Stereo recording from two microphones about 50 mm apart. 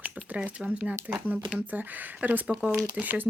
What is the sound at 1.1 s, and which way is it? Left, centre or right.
Speech, right.